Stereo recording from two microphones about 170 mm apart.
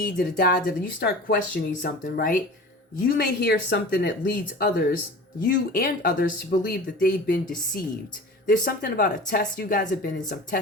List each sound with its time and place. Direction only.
0.0 s speech: 65° left (ahead or behind)